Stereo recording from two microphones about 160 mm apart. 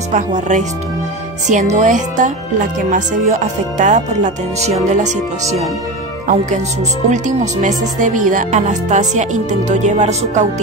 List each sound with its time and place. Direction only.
0.1 s speech: 50° right (ahead or behind)
7.1 s speech: 50° right (ahead or behind)